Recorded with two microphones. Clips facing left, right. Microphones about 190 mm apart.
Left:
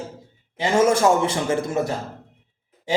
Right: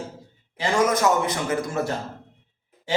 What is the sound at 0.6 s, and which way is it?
A man's voice, 25° left (ahead or behind).